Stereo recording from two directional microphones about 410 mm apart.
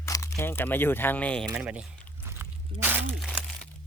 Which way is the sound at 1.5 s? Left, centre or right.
Centre.